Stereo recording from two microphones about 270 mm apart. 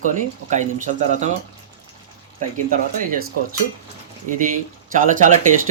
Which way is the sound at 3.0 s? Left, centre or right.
Right.